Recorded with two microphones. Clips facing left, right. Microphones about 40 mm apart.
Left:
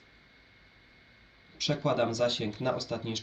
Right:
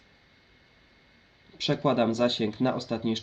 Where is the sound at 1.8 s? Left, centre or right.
Right.